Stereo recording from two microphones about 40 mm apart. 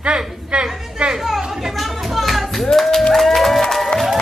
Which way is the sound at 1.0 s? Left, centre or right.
Right.